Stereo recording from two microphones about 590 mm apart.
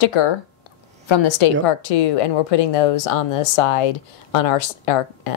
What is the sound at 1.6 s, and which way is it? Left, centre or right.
Speech, left.